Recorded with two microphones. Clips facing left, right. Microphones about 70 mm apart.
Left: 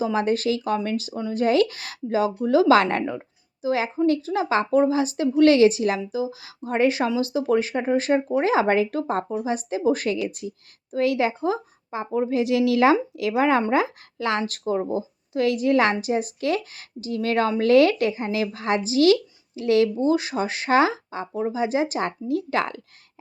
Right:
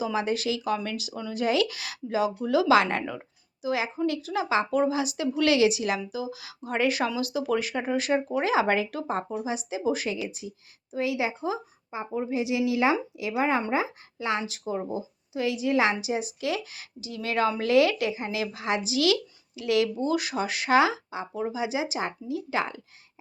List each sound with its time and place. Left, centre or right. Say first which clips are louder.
0.0 s speech: left 5 dB; left
3.6 s a woman's voice: left 5 dB; left